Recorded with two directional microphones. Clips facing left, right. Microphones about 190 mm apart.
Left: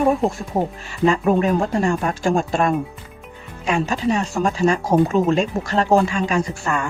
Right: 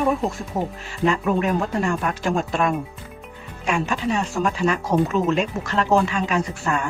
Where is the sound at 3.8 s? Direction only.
35° left (ahead or behind).